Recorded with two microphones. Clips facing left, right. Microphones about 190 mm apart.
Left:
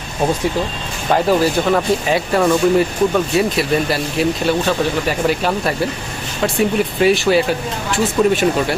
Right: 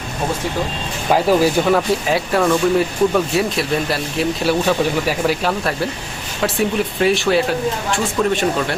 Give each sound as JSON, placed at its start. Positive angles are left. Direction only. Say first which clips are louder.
{"t": 1.1, "sound": "speech", "louder": "even", "side_deg": -10}